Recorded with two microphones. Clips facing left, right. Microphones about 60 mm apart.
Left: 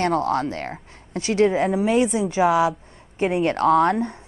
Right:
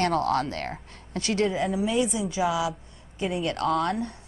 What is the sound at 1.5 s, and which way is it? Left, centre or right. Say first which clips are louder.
Speech: left 6 dB; left.